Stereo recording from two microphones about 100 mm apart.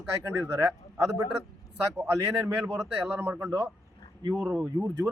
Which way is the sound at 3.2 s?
25° right (ahead or behind).